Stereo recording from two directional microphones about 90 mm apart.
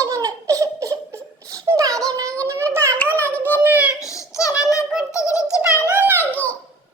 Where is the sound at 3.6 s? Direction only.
20° right (ahead or behind).